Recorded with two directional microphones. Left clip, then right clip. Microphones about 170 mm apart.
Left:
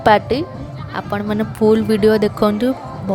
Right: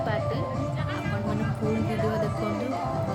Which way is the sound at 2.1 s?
65° left (ahead or behind).